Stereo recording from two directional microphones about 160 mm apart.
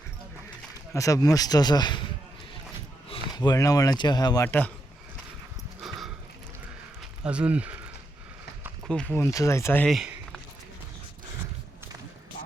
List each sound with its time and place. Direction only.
0.9 s speech: 20° left (ahead or behind)
4.4 s speech: 10° left (ahead or behind)
5.8 s clip-clop: centre (ahead or behind)
7.0 s speech: 5° right (ahead or behind)
8.9 s speech: 10° left (ahead or behind)
9.8 s a sound: 5° right (ahead or behind)